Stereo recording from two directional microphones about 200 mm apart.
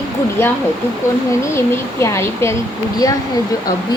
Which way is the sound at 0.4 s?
10° left (ahead or behind).